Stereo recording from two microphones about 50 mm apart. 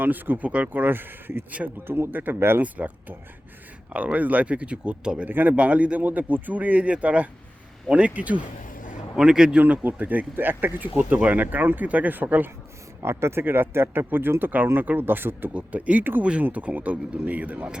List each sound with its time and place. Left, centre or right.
0.0 s speech: right
1.5 s speech: right
2.1 s speech: right
2.6 s speech: right
5.3 s speech: right
5.5 s speech: right
9.1 s a man's voice: centre
9.6 s speech: right
10.3 s speech: right
13.0 s speech: right
13.4 s speech: right
15.5 s speech: right